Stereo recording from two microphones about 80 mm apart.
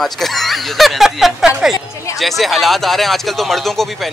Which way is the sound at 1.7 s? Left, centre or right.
Left.